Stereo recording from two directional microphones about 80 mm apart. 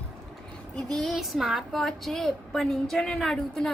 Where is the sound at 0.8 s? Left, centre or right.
Centre.